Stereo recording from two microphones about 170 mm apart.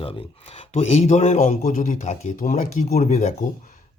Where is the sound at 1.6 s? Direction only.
50° left (ahead or behind).